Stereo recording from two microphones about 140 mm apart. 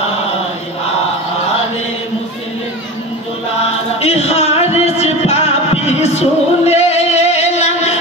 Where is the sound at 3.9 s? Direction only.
50° left (ahead or behind).